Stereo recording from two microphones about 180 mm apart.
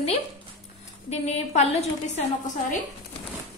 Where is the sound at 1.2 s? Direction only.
35° left (ahead or behind).